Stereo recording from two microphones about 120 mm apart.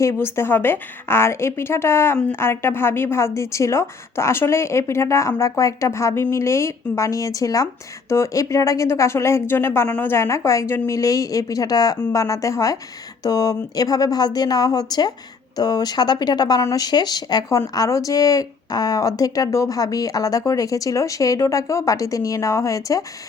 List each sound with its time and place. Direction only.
0.0 s a woman's voice: 20° left (ahead or behind)